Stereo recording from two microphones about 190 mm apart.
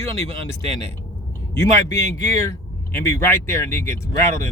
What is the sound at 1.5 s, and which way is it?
Speech, 15° left (ahead or behind).